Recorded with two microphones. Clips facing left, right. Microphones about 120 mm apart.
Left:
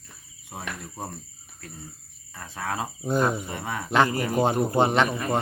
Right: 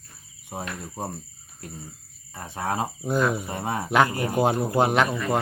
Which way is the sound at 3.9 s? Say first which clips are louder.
Even; 5° right (ahead or behind).